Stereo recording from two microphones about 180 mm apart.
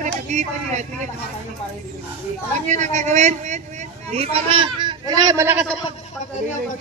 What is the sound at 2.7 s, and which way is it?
A man's voice, 40° right (ahead or behind).